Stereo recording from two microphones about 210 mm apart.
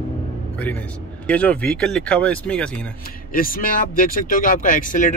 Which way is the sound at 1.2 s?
5° left (ahead or behind).